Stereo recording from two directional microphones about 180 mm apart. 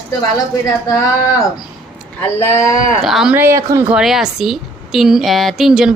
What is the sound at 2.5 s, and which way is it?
Speech, 45° left (ahead or behind).